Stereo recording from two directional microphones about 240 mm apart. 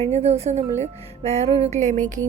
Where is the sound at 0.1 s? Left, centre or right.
Right.